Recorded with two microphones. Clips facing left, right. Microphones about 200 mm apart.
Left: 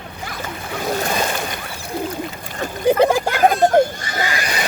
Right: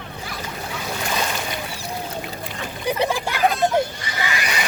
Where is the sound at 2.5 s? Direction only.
45° left (ahead or behind).